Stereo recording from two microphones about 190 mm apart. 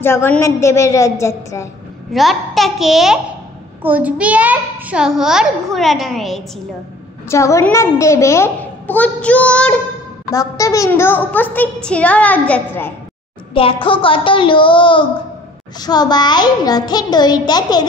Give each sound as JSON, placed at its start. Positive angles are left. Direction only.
{"t": 0.0, "sound": "a child's voice", "side_deg": 10}
{"t": 2.1, "sound": "a child's voice", "side_deg": 0}
{"t": 7.2, "sound": "a child's voice", "side_deg": 15}
{"t": 10.3, "sound": "a child's voice", "side_deg": 15}
{"t": 13.5, "sound": "a child's voice", "side_deg": 30}